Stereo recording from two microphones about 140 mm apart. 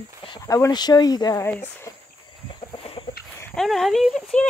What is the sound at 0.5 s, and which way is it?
Speech, 25° left (ahead or behind).